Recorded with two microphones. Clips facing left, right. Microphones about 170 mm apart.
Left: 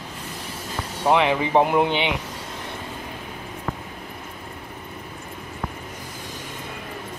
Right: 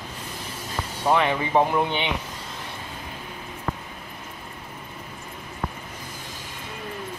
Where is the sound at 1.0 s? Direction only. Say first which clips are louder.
Left 3 dB; 15° left (ahead or behind).